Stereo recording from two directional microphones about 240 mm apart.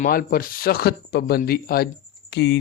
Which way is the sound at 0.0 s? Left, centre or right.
Left.